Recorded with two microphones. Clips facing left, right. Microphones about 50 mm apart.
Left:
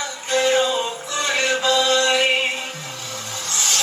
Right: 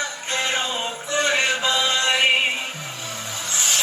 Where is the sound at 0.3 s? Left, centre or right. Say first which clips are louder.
Left 8 dB; right.